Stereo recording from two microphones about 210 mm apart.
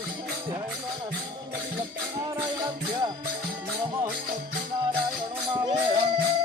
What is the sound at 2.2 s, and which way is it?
Music, 20° right (ahead or behind).